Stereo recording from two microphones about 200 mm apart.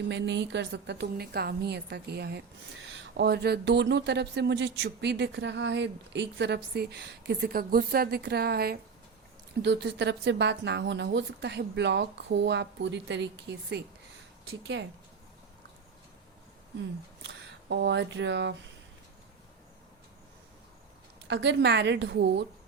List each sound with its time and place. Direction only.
0.1 s speech: 60° right (ahead or behind)
17.2 s speech: 60° right (ahead or behind)
21.2 s speech: 60° right (ahead or behind)